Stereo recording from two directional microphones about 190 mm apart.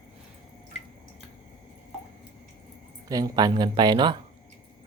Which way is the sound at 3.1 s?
20° right (ahead or behind).